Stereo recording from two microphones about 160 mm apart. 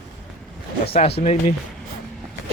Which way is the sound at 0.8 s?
40° left (ahead or behind).